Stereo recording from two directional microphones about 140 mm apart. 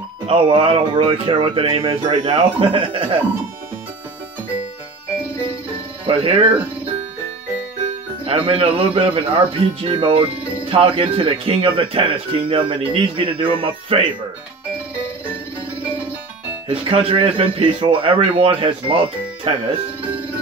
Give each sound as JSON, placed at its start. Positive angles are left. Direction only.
{"t": 0.3, "sound": "speech", "side_deg": -40}
{"t": 6.0, "sound": "speech", "side_deg": -40}
{"t": 8.3, "sound": "speech", "side_deg": -45}
{"t": 16.6, "sound": "speech", "side_deg": -40}